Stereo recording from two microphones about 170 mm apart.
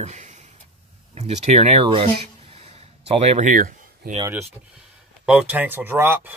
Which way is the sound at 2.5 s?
35° right (ahead or behind).